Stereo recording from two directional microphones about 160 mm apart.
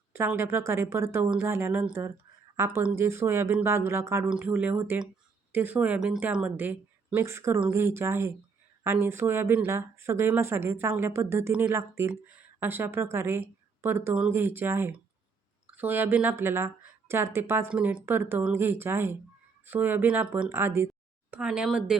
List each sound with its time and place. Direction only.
0.1 s speech: 15° right (ahead or behind)